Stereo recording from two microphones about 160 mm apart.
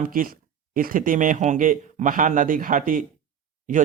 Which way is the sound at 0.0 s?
60° right (ahead or behind).